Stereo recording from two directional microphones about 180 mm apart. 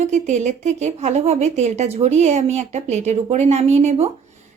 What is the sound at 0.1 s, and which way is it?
A woman's voice, 40° right (ahead or behind).